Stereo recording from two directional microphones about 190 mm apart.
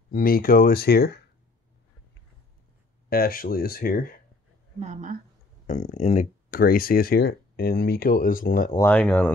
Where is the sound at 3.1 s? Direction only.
50° left (ahead or behind).